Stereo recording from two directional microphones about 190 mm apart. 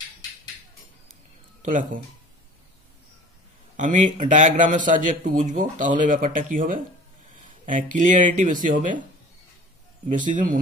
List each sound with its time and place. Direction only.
1.6 s speech: 40° right (ahead or behind)
3.7 s a man's voice: 40° right (ahead or behind)
10.0 s a man's voice: 45° right (ahead or behind)